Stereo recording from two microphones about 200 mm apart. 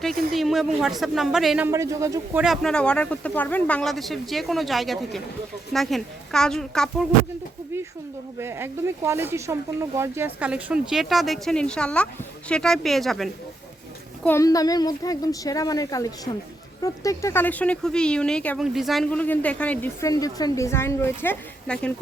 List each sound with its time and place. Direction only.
0.0 s speech: centre (ahead or behind); by 2.4 s 15° right (ahead or behind)
2.4 s speech: centre (ahead or behind)
8.4 s speech: 10° right (ahead or behind)
14.3 s speech: 15° left (ahead or behind)